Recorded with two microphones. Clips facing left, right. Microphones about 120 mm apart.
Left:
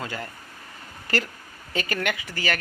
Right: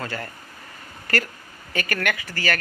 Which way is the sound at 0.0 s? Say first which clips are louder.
Right 2 dB; 15° left (ahead or behind).